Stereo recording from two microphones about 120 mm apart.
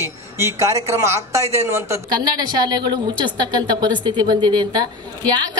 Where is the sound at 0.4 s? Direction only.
25° right (ahead or behind).